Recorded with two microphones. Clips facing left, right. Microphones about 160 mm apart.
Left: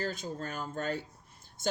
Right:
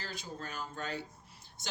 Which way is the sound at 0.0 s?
50° left (ahead or behind).